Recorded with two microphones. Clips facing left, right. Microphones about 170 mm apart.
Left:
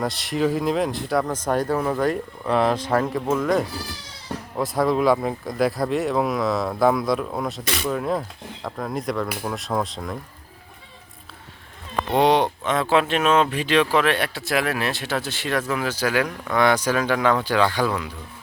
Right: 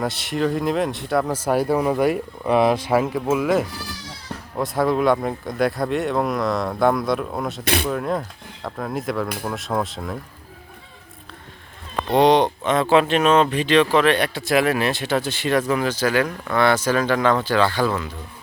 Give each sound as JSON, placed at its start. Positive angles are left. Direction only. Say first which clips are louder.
{"t": 0.0, "sound": "speech", "louder": "even", "side_deg": 0}
{"t": 7.6, "sound": "speech", "louder": "right 5 dB", "side_deg": -60}
{"t": 7.9, "sound": "speech", "louder": "even", "side_deg": 0}
{"t": 12.1, "sound": "speech", "louder": "right 3 dB", "side_deg": 5}